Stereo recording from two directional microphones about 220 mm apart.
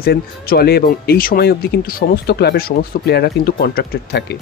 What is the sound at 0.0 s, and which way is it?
Speech, 45° left (ahead or behind).